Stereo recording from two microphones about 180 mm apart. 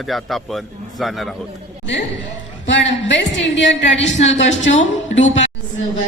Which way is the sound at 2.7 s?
90° left.